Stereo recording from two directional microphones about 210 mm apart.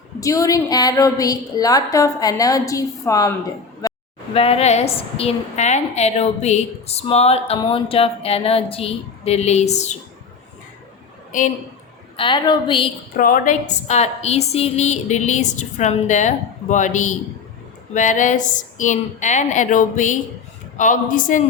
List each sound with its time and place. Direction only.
0.2 s a woman's voice: 15° left (ahead or behind)
3.8 s a sound: 15° left (ahead or behind)
4.4 s a woman's voice: 30° left (ahead or behind)
11.3 s a woman's voice: 40° left (ahead or behind)
12.1 s a woman's voice: 25° left (ahead or behind)
13.1 s a woman's voice: 40° left (ahead or behind)